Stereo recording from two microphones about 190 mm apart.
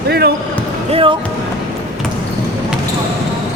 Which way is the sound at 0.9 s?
25° right (ahead or behind).